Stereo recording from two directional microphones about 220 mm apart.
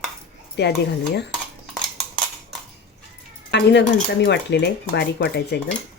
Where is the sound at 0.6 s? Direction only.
50° left (ahead or behind).